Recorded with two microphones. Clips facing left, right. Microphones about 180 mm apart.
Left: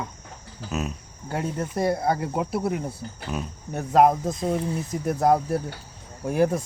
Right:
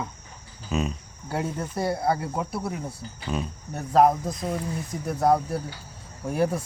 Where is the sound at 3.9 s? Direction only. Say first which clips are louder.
Left 1 dB; 20° left (ahead or behind).